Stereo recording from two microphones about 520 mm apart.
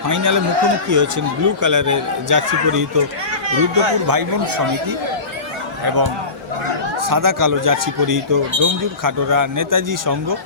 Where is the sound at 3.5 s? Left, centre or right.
Right.